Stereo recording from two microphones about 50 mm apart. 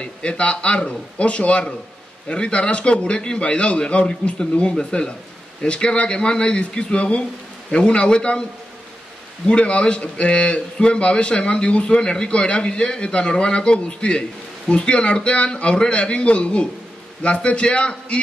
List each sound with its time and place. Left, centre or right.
0.0 s a man's voice: left
9.5 s a man's voice: left